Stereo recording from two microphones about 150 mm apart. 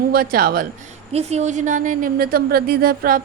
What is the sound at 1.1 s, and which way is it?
A woman's voice, 50° right (ahead or behind).